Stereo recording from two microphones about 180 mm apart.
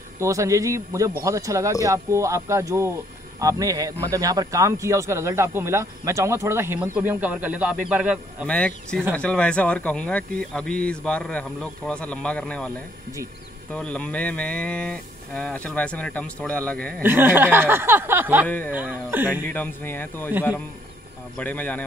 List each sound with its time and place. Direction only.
0.2 s speech: 15° right (ahead or behind)
8.5 s speech: 5° left (ahead or behind)
17.0 s speech: 10° right (ahead or behind)
19.4 s speech: 10° left (ahead or behind)
21.4 s speech: 10° left (ahead or behind)